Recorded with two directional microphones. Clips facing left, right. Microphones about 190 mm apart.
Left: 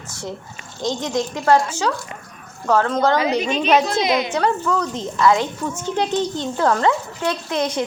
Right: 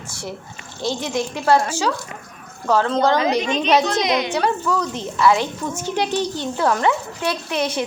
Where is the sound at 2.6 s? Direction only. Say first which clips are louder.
Even; 15° right (ahead or behind).